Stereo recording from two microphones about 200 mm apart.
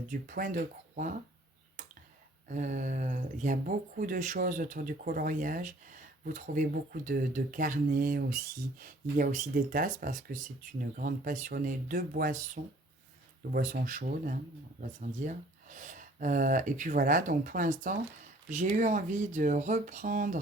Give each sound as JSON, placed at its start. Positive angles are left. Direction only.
{"t": 0.1, "sound": "speech", "side_deg": -45}
{"t": 2.5, "sound": "speech", "side_deg": -40}
{"t": 13.5, "sound": "speech", "side_deg": -45}